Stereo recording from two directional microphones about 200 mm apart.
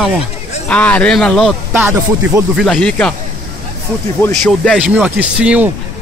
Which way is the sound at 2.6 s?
5° left (ahead or behind).